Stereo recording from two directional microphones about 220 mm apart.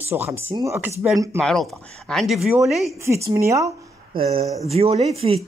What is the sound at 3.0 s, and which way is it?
Speech, 15° right (ahead or behind).